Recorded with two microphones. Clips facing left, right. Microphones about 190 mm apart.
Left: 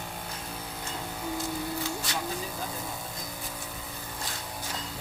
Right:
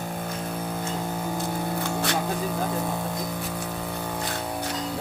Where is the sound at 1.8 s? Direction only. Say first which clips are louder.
Right 7 dB; 55° right (ahead or behind).